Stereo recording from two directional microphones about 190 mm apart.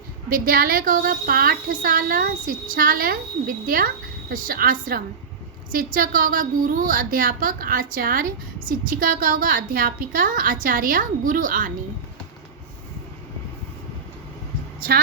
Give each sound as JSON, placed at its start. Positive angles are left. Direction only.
{"t": 0.4, "sound": "a child's voice", "side_deg": -50}